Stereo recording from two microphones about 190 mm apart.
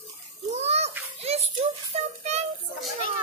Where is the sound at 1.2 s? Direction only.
35° right (ahead or behind).